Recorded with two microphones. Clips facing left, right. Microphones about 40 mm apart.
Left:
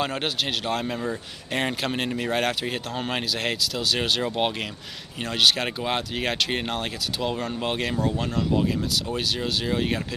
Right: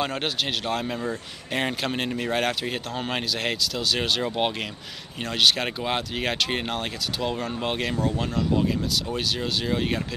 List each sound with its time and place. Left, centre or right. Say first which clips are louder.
0.0 s speech: even; centre